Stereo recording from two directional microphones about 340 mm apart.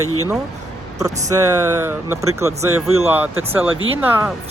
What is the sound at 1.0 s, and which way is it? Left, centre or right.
Speech, centre.